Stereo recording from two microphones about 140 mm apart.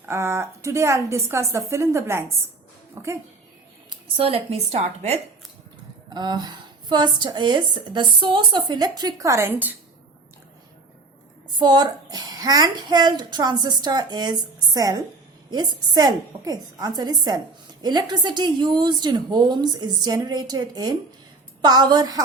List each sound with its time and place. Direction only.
0.0 s a child's voice: 20° right (ahead or behind)
3.8 s speech: 40° right (ahead or behind)
6.1 s a woman's voice: 30° right (ahead or behind); by 9.7 s 15° right (ahead or behind)
11.5 s a child's voice: 30° right (ahead or behind)